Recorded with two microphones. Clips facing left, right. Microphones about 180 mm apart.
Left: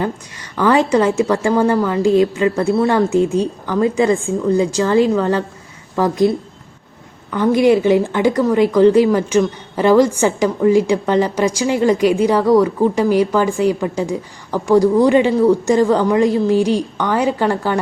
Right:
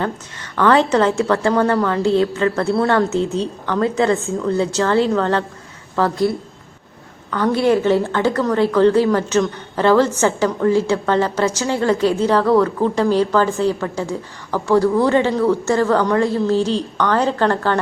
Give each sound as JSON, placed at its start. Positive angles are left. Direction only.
{"t": 0.5, "sound": "a woman's voice", "side_deg": 10}